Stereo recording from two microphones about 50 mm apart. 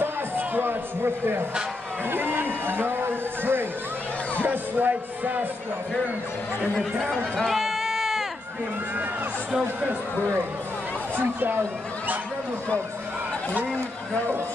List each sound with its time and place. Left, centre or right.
0.0 s a sound: right
2.0 s a man's voice: right
4.4 s music: right
7.3 s run: centre
9.8 s music: right